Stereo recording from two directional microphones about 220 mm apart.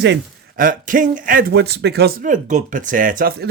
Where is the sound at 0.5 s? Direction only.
40° right (ahead or behind).